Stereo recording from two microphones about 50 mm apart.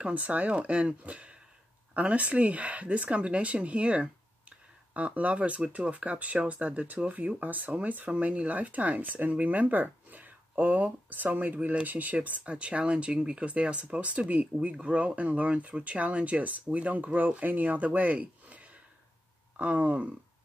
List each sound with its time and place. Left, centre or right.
0.0 s speech: right